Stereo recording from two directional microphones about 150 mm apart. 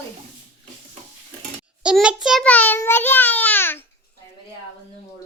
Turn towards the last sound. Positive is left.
turn(degrees=15)  # may be behind; listen again after turning